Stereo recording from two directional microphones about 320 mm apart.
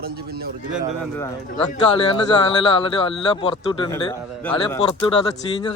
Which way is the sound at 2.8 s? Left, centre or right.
Centre.